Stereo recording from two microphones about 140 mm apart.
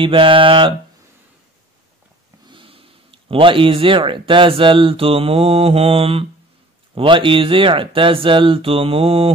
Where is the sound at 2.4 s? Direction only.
40° right (ahead or behind).